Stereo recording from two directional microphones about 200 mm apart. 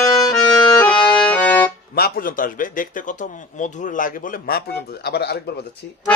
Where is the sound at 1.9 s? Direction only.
50° left (ahead or behind).